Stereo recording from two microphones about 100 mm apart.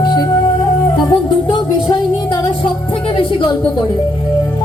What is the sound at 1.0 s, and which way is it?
Music, 50° left (ahead or behind).